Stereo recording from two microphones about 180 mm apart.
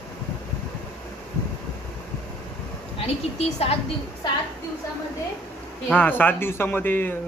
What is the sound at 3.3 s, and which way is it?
Speech, 35° left (ahead or behind).